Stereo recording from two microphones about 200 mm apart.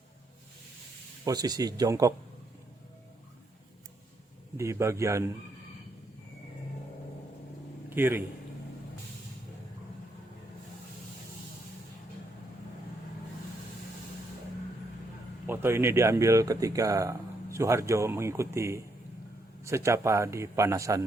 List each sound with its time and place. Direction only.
1.2 s speech: 20° right (ahead or behind)
4.5 s speech: 15° right (ahead or behind)
7.9 s a man's voice: 10° right (ahead or behind)
15.4 s speech: 10° right (ahead or behind)